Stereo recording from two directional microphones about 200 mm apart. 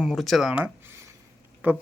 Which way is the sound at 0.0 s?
Centre (ahead or behind).